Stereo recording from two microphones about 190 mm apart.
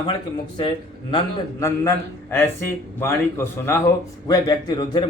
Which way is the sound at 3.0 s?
15° left (ahead or behind).